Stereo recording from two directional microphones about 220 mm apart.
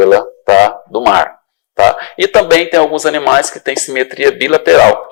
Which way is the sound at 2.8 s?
35° left (ahead or behind).